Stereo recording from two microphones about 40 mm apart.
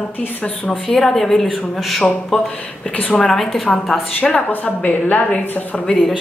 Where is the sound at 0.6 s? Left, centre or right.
Centre.